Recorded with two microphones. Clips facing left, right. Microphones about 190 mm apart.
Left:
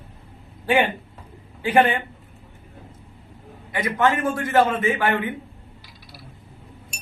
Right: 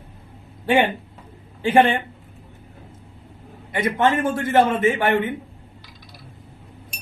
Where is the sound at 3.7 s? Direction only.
25° right (ahead or behind).